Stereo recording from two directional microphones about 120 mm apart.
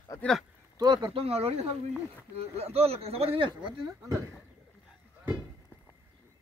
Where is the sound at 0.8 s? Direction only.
40° right (ahead or behind).